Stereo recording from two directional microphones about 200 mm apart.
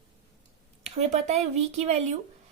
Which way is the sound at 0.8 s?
35° right (ahead or behind).